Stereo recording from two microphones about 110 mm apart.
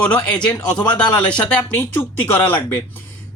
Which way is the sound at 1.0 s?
10° left (ahead or behind).